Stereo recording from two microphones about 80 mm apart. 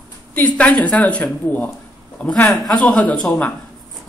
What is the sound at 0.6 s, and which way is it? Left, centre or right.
A woman's voice, centre.